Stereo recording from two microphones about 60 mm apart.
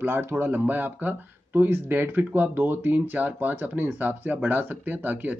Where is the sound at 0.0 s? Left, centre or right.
Right.